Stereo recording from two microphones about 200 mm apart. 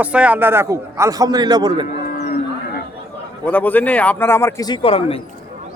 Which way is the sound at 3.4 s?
10° left (ahead or behind).